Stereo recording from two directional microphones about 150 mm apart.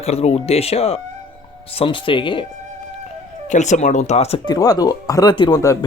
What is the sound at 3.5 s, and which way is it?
Speech, 50° left (ahead or behind).